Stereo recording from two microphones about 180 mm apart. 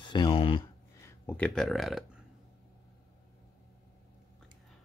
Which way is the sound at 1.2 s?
10° left (ahead or behind).